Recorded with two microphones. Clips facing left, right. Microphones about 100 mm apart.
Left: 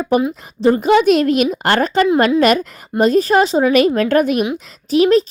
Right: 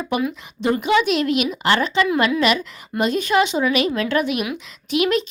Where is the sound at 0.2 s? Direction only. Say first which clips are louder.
Left 5 dB; 30° left (ahead or behind).